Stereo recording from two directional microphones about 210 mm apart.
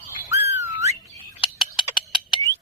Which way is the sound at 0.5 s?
10° right (ahead or behind).